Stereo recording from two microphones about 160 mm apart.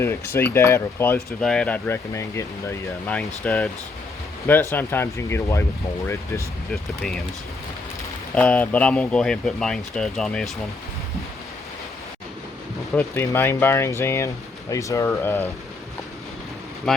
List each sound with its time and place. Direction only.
0.0 s speech: 15° left (ahead or behind)
3.2 s speech: 5° left (ahead or behind)
4.7 s speech: 15° left (ahead or behind)
6.7 s speech: 5° left (ahead or behind)
8.4 s speech: 10° left (ahead or behind)
13.0 s speech: 15° left (ahead or behind)